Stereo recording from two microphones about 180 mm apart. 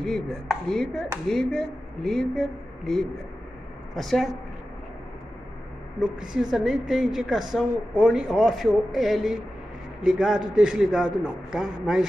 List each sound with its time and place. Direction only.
0.0 s a woman's voice: 5° left (ahead or behind)
5.9 s a woman's voice: 5° right (ahead or behind)